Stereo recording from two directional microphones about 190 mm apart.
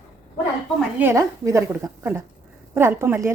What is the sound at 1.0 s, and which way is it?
A woman's voice, 15° right (ahead or behind).